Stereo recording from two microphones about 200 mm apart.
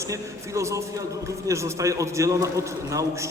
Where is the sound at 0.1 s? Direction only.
15° right (ahead or behind).